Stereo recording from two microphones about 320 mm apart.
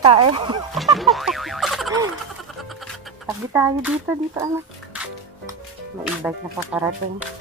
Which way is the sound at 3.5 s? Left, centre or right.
Centre.